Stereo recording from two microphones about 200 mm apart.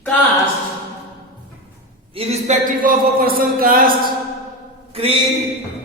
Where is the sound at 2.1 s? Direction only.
30° right (ahead or behind); by 3.9 s 45° right (ahead or behind).